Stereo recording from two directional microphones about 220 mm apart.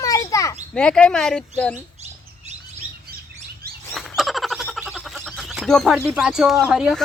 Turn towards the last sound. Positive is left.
turn(degrees=-5)  # may be behind; listen again after turning